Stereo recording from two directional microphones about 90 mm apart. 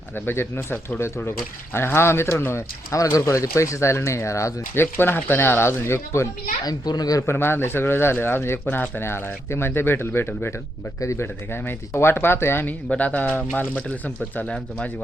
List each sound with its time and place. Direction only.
0.3 s speech: 25° left (ahead or behind)
6.7 s a child's voice: 45° left (ahead or behind)
7.3 s speech: 25° left (ahead or behind)
12.9 s speech: 15° left (ahead or behind)